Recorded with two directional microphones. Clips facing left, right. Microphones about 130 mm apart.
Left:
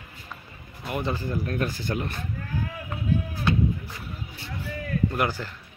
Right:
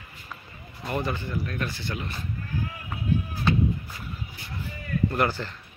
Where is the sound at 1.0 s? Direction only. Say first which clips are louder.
Left 5 dB; 35° left (ahead or behind).